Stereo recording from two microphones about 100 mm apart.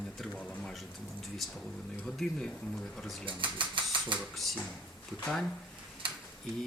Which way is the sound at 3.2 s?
55° right (ahead or behind).